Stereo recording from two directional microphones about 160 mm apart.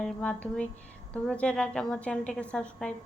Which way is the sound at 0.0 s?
5° left (ahead or behind).